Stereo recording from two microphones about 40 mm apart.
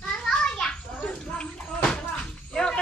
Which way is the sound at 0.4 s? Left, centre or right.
Centre.